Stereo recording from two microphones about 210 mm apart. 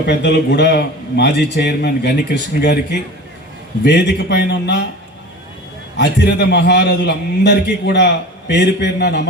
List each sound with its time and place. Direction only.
0.0 s a man's voice: 55° left (ahead or behind)
3.8 s a man's voice: 55° left (ahead or behind)
6.0 s a man's voice: 55° left (ahead or behind)